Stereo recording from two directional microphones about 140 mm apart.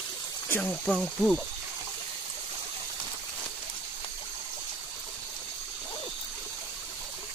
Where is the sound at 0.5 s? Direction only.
10° left (ahead or behind).